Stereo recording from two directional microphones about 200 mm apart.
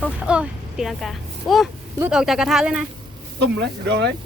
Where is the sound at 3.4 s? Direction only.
60° right (ahead or behind).